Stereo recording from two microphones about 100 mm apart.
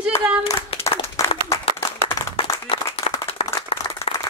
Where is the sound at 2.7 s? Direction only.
90° left.